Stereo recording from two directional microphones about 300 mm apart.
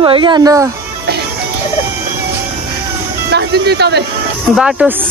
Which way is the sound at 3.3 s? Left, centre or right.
Right.